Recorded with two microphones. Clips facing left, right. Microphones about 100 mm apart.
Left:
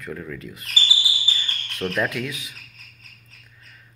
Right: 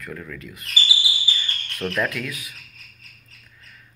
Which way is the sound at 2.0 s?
20° left (ahead or behind).